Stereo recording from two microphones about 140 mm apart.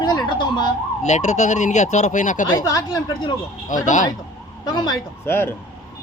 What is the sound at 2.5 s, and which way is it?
Speech, 25° left (ahead or behind).